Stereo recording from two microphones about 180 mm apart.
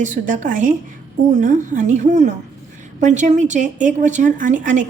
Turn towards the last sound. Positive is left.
turn(degrees=-45)  # may be behind; listen again after turning